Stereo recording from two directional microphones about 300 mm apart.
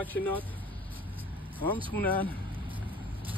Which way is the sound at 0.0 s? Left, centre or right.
Centre.